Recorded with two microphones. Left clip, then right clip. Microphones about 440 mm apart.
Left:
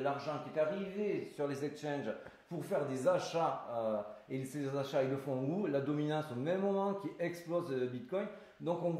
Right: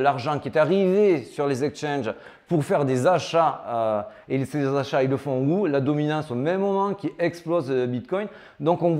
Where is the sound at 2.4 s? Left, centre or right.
Right.